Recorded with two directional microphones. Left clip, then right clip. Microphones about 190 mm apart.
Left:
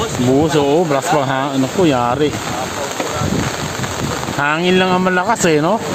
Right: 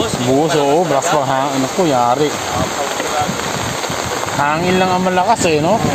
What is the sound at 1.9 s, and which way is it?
Speech, 50° left (ahead or behind).